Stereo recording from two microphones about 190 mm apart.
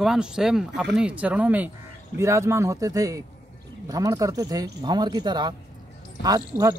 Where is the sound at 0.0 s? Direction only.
5° right (ahead or behind).